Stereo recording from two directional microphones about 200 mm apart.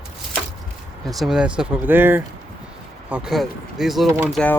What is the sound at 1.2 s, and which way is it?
Speech, 5° right (ahead or behind).